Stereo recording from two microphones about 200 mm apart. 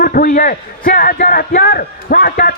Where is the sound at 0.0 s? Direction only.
45° left (ahead or behind).